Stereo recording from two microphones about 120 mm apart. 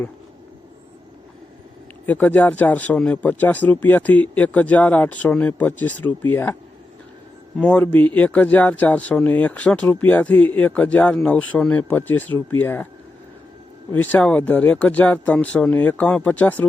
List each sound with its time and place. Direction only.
2.0 s speech: 15° left (ahead or behind)
13.9 s speech: 15° left (ahead or behind)